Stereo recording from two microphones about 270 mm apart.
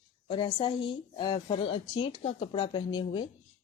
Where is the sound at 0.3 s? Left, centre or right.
Centre.